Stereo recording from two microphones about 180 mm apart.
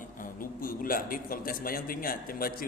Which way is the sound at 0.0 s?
50° left (ahead or behind).